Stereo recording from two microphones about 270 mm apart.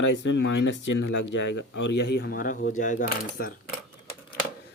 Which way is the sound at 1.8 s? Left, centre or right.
Left.